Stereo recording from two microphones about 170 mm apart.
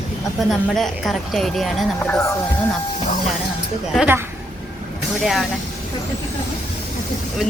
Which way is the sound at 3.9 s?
10° right (ahead or behind).